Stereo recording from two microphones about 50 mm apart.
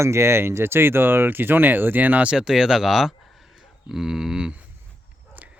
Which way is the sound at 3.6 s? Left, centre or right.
Centre.